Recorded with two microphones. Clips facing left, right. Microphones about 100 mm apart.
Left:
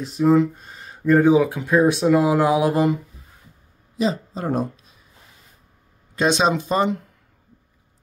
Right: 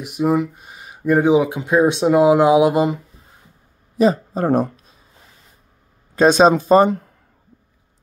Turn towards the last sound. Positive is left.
turn(degrees=-40)  # may be behind; listen again after turning